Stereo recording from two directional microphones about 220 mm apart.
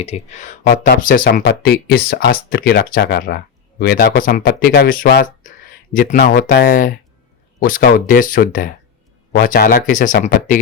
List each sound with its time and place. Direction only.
0.0 s speech: 30° left (ahead or behind)